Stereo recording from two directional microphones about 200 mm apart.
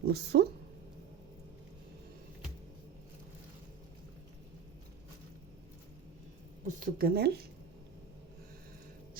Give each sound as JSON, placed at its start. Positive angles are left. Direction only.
{"t": 0.1, "sound": "a woman's voice", "side_deg": -55}
{"t": 6.7, "sound": "a woman's voice", "side_deg": -45}